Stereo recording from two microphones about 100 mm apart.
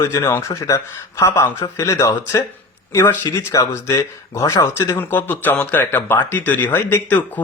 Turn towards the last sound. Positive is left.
turn(degrees=15)  # may be behind; listen again after turning